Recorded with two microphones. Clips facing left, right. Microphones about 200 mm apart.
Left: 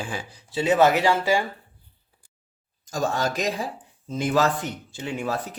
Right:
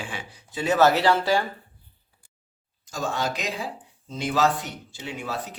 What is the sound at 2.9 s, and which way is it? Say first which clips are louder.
Speech: left 3 dB; 45° left (ahead or behind).